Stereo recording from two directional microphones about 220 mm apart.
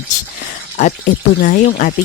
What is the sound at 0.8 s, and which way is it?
Speech, 35° left (ahead or behind).